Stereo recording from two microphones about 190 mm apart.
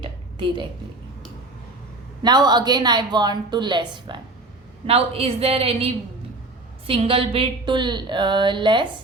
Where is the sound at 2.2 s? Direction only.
20° right (ahead or behind).